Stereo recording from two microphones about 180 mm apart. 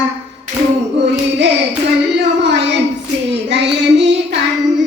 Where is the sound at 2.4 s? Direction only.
75° right (ahead or behind).